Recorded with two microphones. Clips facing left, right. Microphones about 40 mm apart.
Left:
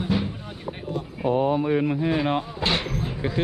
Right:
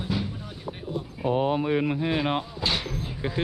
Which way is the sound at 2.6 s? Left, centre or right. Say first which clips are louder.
Left 3 dB; left.